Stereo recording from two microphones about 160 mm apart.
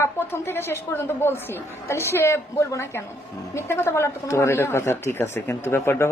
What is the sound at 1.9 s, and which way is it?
A man's voice, 15° left (ahead or behind).